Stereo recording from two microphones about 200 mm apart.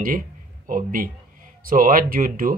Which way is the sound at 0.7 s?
45° right (ahead or behind).